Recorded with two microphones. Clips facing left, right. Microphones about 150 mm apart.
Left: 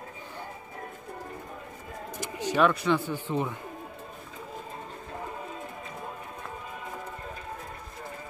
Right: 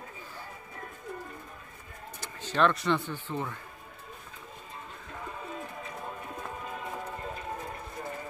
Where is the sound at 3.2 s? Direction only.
15° left (ahead or behind).